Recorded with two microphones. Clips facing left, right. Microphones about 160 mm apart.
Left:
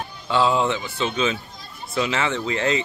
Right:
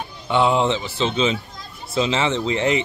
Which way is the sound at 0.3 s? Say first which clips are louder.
Right 2 dB; 20° right (ahead or behind).